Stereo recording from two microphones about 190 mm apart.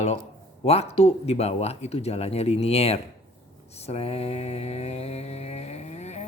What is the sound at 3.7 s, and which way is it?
Mantra, 35° left (ahead or behind).